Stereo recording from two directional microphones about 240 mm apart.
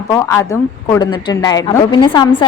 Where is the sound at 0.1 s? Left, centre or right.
Centre.